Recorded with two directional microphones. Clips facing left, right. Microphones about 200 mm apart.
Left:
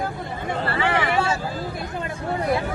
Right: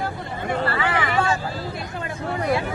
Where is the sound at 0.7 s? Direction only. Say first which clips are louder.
Left 1 dB; 25° left (ahead or behind).